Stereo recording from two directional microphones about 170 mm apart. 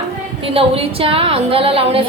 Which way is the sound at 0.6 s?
35° right (ahead or behind).